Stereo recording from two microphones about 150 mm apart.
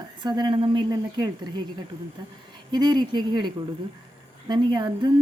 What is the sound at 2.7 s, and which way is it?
Speech, 30° right (ahead or behind).